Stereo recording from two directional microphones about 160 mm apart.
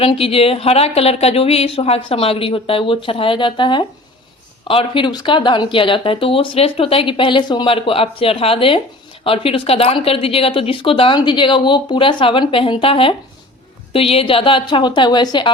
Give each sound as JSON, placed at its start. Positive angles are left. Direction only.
{"t": 0.0, "sound": "a woman's voice", "side_deg": 35}